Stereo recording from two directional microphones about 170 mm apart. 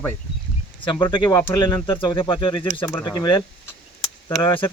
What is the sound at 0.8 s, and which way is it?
Speech, 25° left (ahead or behind).